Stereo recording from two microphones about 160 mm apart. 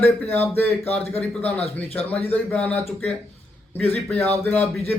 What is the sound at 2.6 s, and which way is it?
Speech, 10° left (ahead or behind).